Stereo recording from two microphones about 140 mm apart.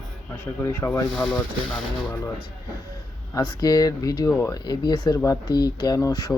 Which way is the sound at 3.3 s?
25° left (ahead or behind).